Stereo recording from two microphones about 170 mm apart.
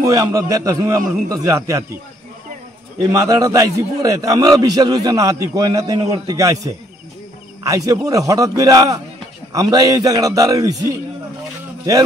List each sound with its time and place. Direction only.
0.0 s a man's voice: 20° right (ahead or behind)
3.0 s a man's voice: 20° right (ahead or behind)